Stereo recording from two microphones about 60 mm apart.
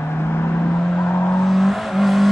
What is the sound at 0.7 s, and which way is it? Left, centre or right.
Vehicle, left.